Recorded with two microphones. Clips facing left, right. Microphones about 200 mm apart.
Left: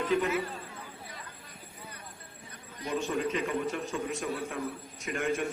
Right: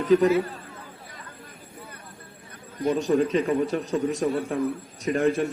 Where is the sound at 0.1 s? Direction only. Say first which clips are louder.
Right 12 dB; 35° right (ahead or behind).